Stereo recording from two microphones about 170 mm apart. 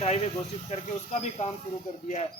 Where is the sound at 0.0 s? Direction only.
40° left (ahead or behind).